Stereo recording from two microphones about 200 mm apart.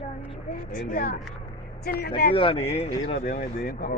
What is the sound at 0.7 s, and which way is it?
Speech, 45° left (ahead or behind).